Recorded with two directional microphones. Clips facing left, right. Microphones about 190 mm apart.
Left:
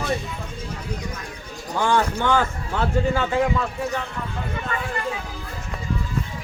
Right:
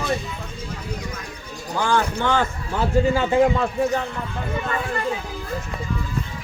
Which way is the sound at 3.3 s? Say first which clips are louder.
Right 4 dB; 30° right (ahead or behind).